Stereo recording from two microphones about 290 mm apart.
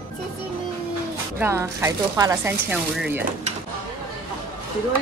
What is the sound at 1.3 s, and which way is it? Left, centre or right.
Speech, centre.